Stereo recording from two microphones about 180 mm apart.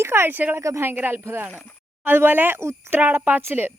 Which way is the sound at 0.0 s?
15° right (ahead or behind).